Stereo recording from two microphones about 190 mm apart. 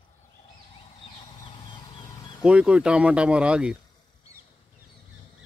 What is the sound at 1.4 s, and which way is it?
Vehicle, 25° left (ahead or behind).